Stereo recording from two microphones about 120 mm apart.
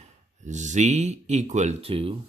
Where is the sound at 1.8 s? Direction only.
50° right (ahead or behind).